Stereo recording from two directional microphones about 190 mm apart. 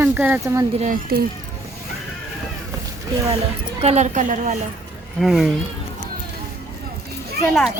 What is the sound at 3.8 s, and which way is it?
Speech, 35° right (ahead or behind).